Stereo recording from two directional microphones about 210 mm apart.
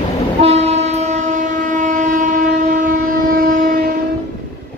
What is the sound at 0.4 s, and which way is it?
Train, 30° right (ahead or behind).